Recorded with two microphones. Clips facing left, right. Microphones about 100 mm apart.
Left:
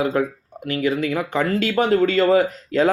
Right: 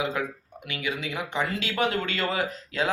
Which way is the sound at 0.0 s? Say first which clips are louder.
Left 8 dB; 45° left (ahead or behind).